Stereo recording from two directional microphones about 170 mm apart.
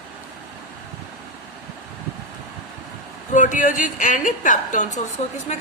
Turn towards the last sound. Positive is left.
turn(degrees=40)  # may be behind; listen again after turning